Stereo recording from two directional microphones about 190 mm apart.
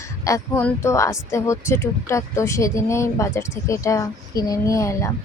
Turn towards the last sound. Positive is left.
turn(degrees=15)  # may be behind; listen again after turning